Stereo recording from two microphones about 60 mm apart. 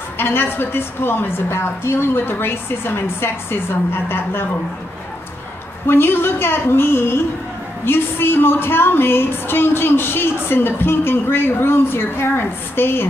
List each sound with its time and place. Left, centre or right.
0.2 s a woman's voice: left
5.9 s a woman's voice: left